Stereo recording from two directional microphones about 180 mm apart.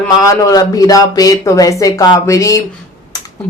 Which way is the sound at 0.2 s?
20° left (ahead or behind).